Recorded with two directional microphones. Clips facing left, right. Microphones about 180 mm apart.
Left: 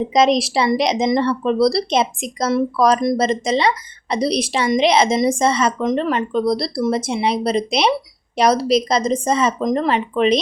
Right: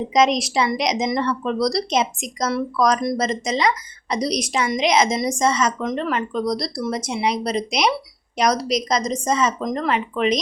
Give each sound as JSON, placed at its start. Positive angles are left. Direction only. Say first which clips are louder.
{"t": 0.1, "sound": "a woman's voice", "louder": "left 2 dB", "side_deg": 30}